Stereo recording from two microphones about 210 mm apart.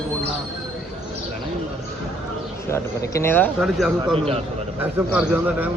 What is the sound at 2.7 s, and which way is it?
A man's voice, 10° left (ahead or behind).